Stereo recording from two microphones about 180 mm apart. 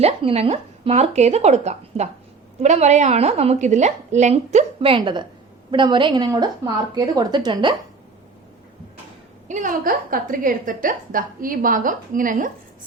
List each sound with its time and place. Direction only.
0.0 s a woman's voice: 35° right (ahead or behind)
9.5 s a woman's voice: 45° right (ahead or behind)